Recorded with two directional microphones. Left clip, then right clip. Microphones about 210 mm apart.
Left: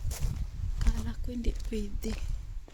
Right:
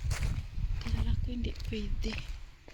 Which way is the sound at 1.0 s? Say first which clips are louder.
Left 2 dB; 30° left (ahead or behind).